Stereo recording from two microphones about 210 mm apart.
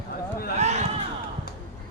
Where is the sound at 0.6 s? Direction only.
30° right (ahead or behind).